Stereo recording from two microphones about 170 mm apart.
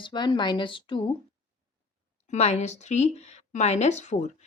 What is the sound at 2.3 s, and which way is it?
Speech, 40° left (ahead or behind).